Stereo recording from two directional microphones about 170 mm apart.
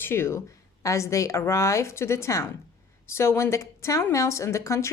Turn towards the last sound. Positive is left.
turn(degrees=15)  # may be behind; listen again after turning